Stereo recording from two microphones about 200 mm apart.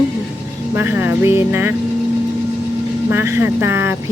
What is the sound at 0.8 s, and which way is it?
Speech, 10° right (ahead or behind).